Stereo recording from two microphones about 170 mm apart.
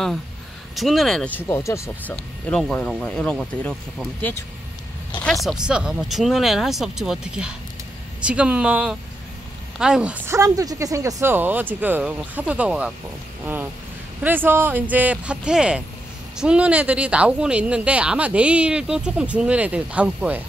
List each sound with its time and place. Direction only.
0.7 s speech: centre (ahead or behind)
5.2 s speech: centre (ahead or behind)
14.2 s speech: 10° right (ahead or behind)